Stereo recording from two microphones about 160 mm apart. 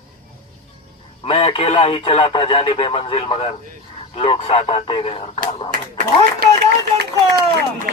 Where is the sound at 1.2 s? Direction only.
35° left (ahead or behind).